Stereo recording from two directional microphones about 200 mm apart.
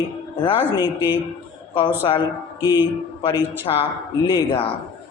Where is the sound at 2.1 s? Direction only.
25° left (ahead or behind).